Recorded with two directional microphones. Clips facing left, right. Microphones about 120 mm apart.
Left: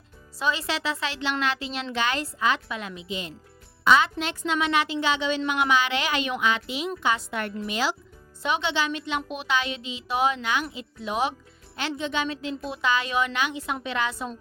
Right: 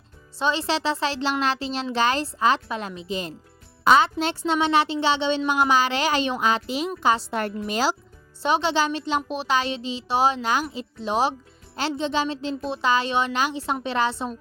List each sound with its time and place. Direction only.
0.3 s speech: 30° right (ahead or behind)